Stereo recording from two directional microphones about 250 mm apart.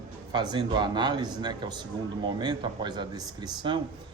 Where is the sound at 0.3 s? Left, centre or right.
Centre.